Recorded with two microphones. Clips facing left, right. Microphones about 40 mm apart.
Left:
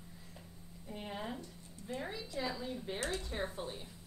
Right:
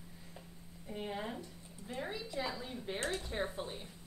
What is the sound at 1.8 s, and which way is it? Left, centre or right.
Speech, right.